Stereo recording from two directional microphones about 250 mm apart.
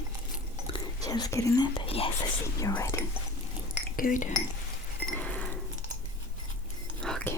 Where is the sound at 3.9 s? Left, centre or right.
Left.